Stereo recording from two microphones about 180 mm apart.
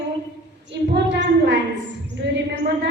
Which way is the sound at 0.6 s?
80° right.